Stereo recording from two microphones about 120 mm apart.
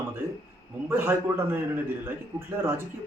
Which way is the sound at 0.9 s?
20° right (ahead or behind).